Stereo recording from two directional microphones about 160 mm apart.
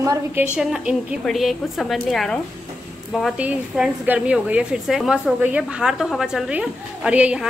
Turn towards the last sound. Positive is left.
turn(degrees=-10)  # may be behind; listen again after turning